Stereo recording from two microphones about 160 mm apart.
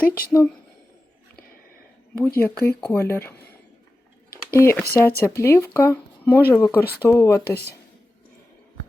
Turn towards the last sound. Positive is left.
turn(degrees=20)  # may be behind; listen again after turning